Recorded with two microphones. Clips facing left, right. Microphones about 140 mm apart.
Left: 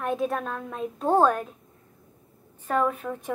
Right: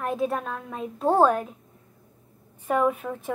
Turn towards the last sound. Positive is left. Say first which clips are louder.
# right 2 dB
turn(degrees=-5)  # may be behind; listen again after turning